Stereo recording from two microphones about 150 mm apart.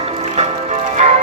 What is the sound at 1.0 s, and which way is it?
Music, 50° right (ahead or behind).